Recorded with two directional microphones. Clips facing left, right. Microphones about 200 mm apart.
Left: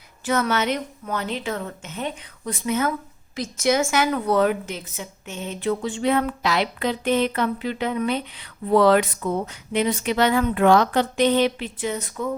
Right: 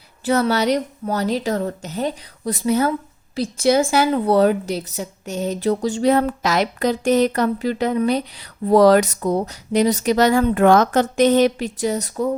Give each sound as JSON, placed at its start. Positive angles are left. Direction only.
{"t": 0.3, "sound": "a woman's voice", "side_deg": -35}